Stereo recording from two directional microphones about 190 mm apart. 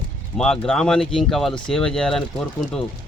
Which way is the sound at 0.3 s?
5° left (ahead or behind).